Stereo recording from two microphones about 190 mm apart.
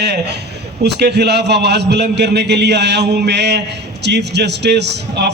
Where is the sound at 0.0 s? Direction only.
60° right (ahead or behind).